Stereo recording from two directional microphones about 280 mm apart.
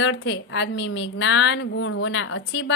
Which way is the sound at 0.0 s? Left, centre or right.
Left.